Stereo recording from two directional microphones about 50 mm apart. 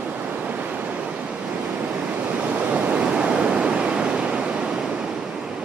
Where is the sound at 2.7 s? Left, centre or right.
Right.